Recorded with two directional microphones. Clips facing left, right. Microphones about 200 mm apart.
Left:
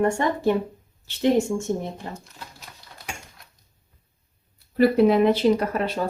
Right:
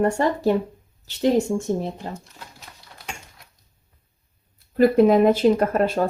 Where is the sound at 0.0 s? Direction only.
35° right (ahead or behind).